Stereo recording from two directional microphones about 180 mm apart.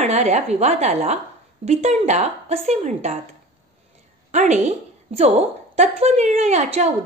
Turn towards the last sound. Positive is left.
turn(degrees=-40)  # may be behind; listen again after turning